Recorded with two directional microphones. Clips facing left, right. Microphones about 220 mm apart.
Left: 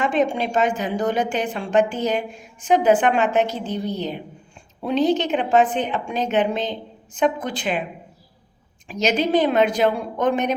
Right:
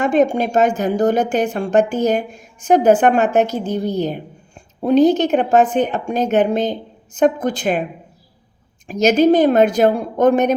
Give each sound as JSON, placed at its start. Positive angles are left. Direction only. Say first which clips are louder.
{"t": 0.0, "sound": "a woman's voice", "louder": "right 5 dB", "side_deg": -45}
{"t": 8.9, "sound": "a woman's voice", "louder": "right 7 dB", "side_deg": -45}